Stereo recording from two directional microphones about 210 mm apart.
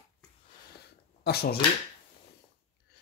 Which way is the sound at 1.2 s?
50° left (ahead or behind).